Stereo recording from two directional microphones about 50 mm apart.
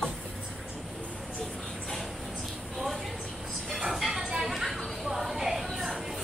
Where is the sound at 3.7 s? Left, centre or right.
Centre.